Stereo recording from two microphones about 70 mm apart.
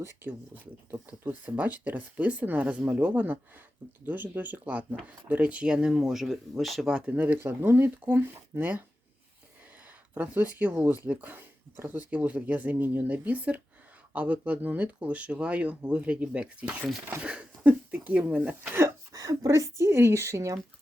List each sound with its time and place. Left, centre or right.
0.3 s speech: right; by 7.1 s centre
7.1 s speech: right
10.2 s speech: right
19.1 s a sound: right
19.5 s a woman's voice: right